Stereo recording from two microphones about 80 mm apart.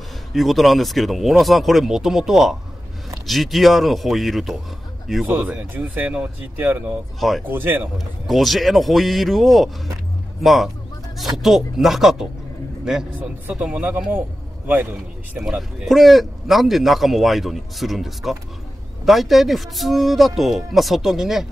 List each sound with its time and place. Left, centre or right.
0.3 s speech: centre
5.4 s speech: centre
7.2 s speech: centre
7.4 s speech: right
8.3 s speech: centre
15.3 s speech: centre